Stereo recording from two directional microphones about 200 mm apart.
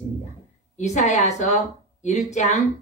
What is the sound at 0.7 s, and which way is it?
Speech, 35° left (ahead or behind).